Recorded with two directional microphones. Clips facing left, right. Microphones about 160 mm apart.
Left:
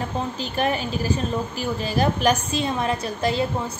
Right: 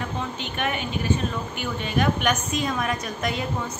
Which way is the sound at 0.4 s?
35° left (ahead or behind).